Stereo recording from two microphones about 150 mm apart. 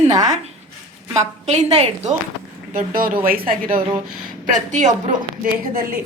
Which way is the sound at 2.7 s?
70° right (ahead or behind).